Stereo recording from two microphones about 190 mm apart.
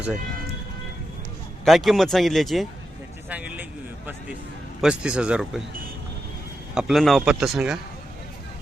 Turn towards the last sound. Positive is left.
turn(degrees=0)  # may be behind; listen again after turning